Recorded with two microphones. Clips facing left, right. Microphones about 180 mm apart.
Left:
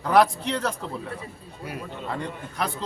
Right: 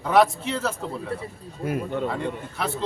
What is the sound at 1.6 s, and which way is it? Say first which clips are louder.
Speech: right 9 dB; 45° right (ahead or behind).